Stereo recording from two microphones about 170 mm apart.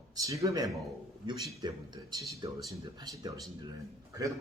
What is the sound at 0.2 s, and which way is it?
A man's voice, 20° right (ahead or behind).